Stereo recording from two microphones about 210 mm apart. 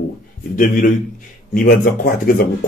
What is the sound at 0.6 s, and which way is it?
Speech, 40° left (ahead or behind).